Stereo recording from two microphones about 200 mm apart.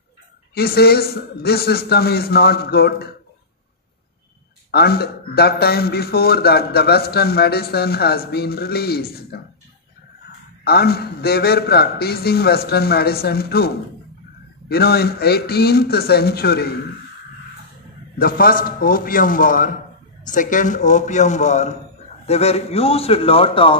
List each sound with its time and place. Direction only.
0.6 s a man's voice: 50° left (ahead or behind)
4.6 s a man's voice: 50° left (ahead or behind)
10.6 s a man's voice: 50° left (ahead or behind)
18.2 s a man's voice: 45° left (ahead or behind); by 23.8 s 25° left (ahead or behind)